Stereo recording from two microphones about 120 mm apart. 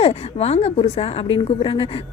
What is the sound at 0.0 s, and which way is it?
A woman's voice, 60° left (ahead or behind).